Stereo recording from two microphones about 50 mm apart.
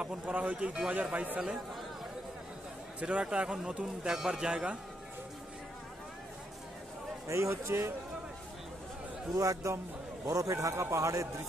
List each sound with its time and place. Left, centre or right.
0.0 s a man's voice: right
0.3 s a man's voice: right
0.6 s a man's voice: right
3.0 s a man's voice: right
7.2 s speech: right
9.4 s a man's voice: right